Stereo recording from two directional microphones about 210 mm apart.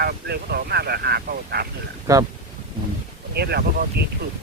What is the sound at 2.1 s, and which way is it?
Speech, 15° right (ahead or behind).